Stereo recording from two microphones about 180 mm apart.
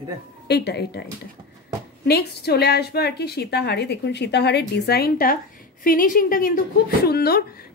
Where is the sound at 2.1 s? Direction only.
60° left (ahead or behind).